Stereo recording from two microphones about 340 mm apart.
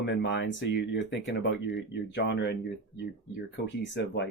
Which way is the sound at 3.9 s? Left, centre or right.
Left.